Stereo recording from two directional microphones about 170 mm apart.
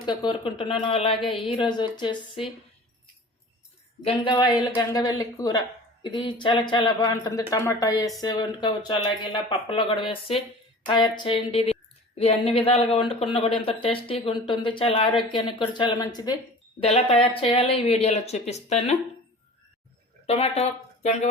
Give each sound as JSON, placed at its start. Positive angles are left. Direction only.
{"t": 0.0, "sound": "a woman's voice", "side_deg": 25}
{"t": 4.0, "sound": "a woman's voice", "side_deg": 25}
{"t": 16.8, "sound": "speech", "side_deg": 35}
{"t": 20.2, "sound": "speech", "side_deg": 40}